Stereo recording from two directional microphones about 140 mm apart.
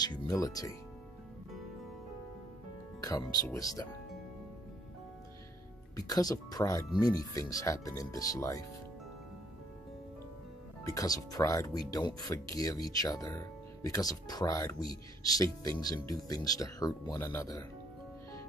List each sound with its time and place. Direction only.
0.0 s speech: 30° left (ahead or behind)
3.0 s speech: 25° left (ahead or behind)
5.9 s speech: 25° left (ahead or behind)
10.8 s speech: 25° left (ahead or behind)